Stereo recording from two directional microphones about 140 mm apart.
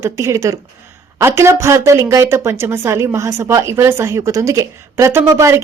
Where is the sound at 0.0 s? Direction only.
20° right (ahead or behind).